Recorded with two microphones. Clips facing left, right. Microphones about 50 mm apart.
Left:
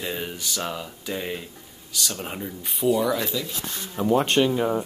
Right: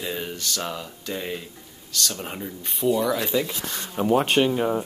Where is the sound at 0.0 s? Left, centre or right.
Centre.